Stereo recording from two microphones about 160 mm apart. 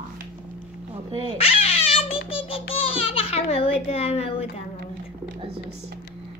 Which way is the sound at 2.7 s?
35° left (ahead or behind).